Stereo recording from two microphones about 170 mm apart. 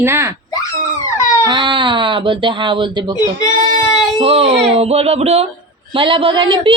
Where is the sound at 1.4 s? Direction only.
25° right (ahead or behind).